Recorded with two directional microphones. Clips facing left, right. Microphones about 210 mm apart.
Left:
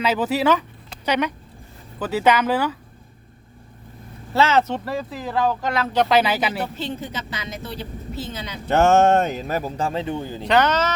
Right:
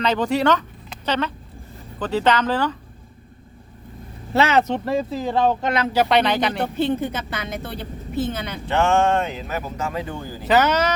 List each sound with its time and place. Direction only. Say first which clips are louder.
0.0 s speech: right 1 dB; 5° left (ahead or behind)
4.4 s speech: right 1 dB; 15° right (ahead or behind)
5.9 s speech: left 1 dB; 5° right (ahead or behind)
6.7 s speech: right 7 dB; 55° right (ahead or behind)
8.6 s speech: left 3 dB; 40° left (ahead or behind); by 10.4 s 20° left (ahead or behind)
10.4 s speech: right 1 dB; 5° right (ahead or behind)